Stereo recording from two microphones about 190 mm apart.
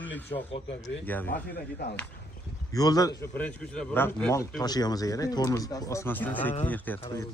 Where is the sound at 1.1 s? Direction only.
10° left (ahead or behind).